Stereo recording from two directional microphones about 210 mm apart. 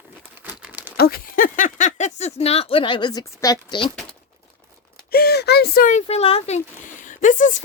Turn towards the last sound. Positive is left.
turn(degrees=35)  # may be behind; listen again after turning